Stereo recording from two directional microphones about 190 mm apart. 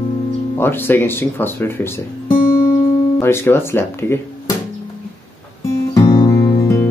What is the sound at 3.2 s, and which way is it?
Speech, 10° left (ahead or behind).